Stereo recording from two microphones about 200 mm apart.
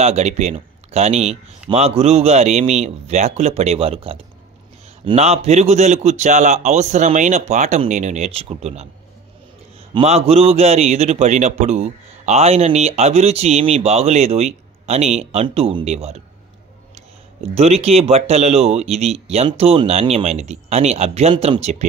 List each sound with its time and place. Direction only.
0.0 s a man's voice: 35° right (ahead or behind)
9.9 s a man's voice: 30° right (ahead or behind)
17.6 s a man's voice: 30° right (ahead or behind)